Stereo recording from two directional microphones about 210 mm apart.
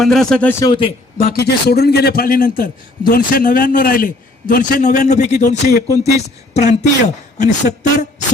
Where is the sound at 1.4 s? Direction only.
50° left (ahead or behind); by 6.7 s 30° left (ahead or behind).